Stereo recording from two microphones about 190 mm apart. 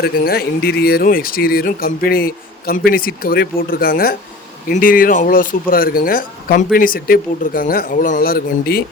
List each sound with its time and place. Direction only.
0.0 s speech: 55° left (ahead or behind)